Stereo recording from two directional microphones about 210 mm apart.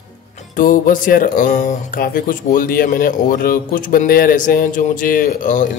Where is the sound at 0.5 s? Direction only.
40° left (ahead or behind).